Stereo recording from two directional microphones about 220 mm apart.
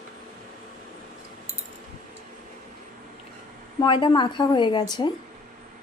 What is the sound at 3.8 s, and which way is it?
Speech, 20° left (ahead or behind).